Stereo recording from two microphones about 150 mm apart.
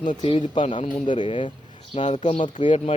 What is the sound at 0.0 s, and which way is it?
Speech, 60° left (ahead or behind).